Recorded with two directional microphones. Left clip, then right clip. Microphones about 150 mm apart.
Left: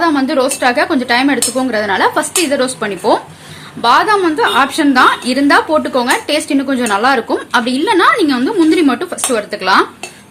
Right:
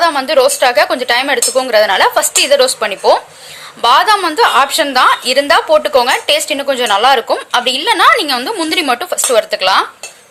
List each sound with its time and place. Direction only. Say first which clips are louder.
0.0 s a woman's voice: right 3 dB; 15° right (ahead or behind)